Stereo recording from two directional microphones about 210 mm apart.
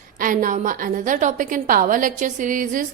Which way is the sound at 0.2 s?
40° right (ahead or behind).